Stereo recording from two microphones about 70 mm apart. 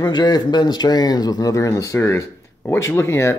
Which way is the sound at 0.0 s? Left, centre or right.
Left.